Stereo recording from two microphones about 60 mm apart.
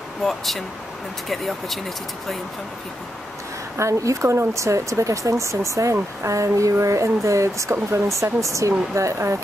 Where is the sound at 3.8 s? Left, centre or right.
Right.